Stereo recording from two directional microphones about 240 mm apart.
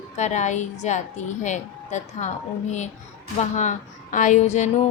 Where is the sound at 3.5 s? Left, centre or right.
Left.